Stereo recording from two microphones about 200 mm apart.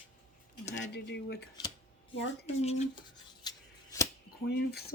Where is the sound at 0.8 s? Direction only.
60° left (ahead or behind).